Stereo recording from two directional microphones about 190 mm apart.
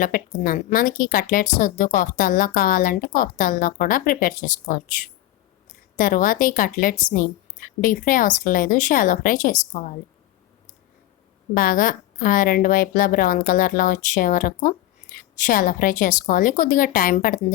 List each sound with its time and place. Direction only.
0.0 s a woman's voice: 45° left (ahead or behind)
6.0 s a woman's voice: 45° left (ahead or behind)
11.5 s a woman's voice: 45° left (ahead or behind)